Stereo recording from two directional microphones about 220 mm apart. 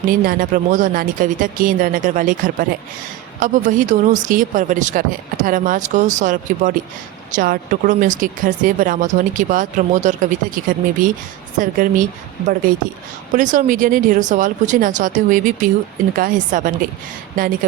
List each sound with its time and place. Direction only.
0.1 s speech: 40° right (ahead or behind)